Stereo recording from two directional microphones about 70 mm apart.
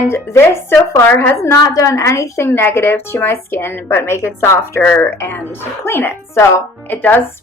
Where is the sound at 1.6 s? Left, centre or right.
Left.